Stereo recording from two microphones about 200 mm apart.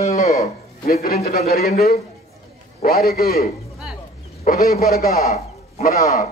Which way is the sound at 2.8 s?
50° left (ahead or behind).